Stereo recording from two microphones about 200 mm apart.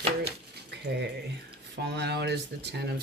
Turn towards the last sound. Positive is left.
turn(degrees=-55)  # may be behind; listen again after turning